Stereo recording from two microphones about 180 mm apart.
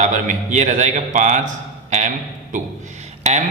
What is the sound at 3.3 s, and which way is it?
Speech, 40° right (ahead or behind).